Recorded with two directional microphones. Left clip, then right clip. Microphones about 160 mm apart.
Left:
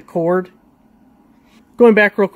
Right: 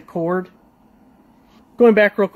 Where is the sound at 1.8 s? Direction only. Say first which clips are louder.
Left 2 dB; 25° left (ahead or behind).